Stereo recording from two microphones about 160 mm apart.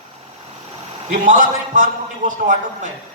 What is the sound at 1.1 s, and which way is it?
A man's voice, 55° right (ahead or behind).